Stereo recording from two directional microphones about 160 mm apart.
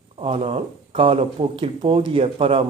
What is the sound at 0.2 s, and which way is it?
Speech, 35° right (ahead or behind).